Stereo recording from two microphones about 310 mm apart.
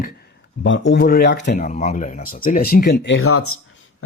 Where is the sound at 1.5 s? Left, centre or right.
Left.